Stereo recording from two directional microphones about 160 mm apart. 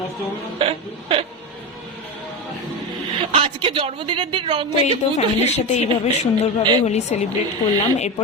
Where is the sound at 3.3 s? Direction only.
35° right (ahead or behind).